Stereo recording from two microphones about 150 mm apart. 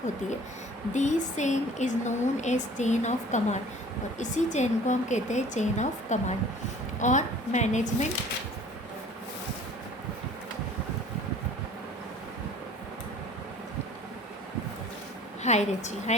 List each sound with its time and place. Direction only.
0.9 s speech: 50° left (ahead or behind)
15.4 s speech: 50° left (ahead or behind)